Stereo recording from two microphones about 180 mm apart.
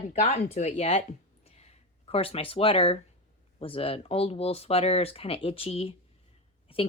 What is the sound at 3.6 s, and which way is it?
Speech, 30° left (ahead or behind).